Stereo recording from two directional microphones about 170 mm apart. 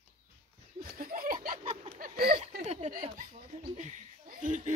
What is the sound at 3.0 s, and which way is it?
Speech, 50° right (ahead or behind).